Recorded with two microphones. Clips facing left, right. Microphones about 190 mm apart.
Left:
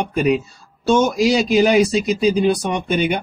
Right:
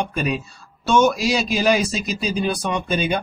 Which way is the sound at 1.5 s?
20° left (ahead or behind).